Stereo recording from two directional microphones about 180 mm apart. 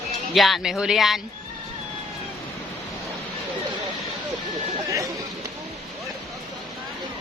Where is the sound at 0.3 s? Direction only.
Centre (ahead or behind).